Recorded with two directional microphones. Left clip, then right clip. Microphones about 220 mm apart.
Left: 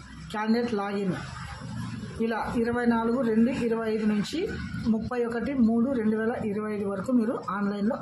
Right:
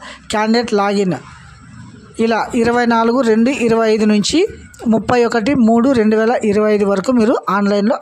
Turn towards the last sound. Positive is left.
turn(degrees=-45)  # may be behind; listen again after turning